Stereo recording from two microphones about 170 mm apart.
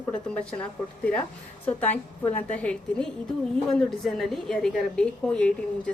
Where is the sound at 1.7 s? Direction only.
10° left (ahead or behind).